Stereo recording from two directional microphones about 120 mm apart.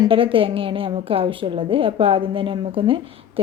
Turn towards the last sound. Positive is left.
turn(degrees=-45)  # may be behind; listen again after turning